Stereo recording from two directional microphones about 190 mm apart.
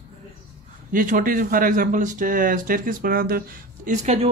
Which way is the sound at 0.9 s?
45° right (ahead or behind).